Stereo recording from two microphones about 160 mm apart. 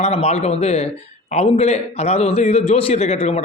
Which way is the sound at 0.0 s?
40° left (ahead or behind).